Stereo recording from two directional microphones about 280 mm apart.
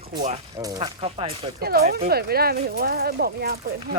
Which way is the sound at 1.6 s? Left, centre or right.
Right.